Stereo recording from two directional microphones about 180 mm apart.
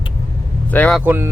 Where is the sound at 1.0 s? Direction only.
10° right (ahead or behind).